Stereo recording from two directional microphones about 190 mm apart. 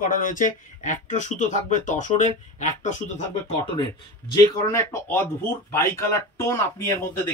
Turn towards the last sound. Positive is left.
turn(degrees=15)  # may be behind; listen again after turning